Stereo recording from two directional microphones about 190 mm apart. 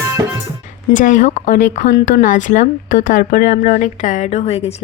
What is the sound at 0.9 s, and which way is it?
Speech, 40° left (ahead or behind).